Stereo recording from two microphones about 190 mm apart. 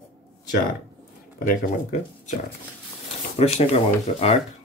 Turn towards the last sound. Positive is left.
turn(degrees=30)  # may be behind; listen again after turning